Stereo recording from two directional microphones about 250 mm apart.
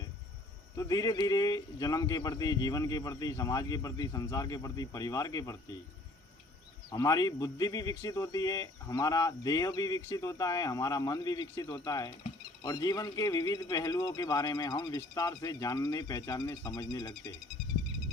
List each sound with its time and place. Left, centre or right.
0.8 s speech: centre
6.9 s speech: centre